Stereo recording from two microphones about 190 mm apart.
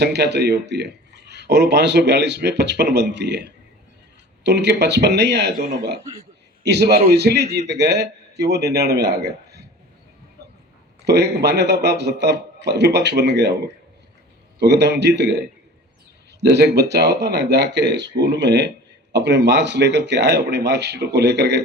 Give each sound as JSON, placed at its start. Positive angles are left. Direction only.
{"t": 0.0, "sound": "a man's voice", "side_deg": -60}
{"t": 11.0, "sound": "speech", "side_deg": -60}
{"t": 14.6, "sound": "speech", "side_deg": -65}
{"t": 16.4, "sound": "a man's voice", "side_deg": -60}